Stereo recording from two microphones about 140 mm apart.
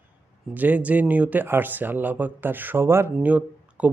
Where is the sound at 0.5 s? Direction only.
10° right (ahead or behind).